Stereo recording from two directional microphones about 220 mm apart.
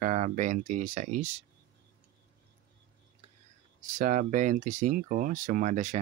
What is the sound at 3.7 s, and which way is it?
Speech, 35° right (ahead or behind).